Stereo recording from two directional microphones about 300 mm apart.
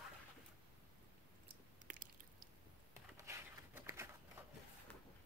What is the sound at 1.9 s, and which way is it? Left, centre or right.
Biting, right.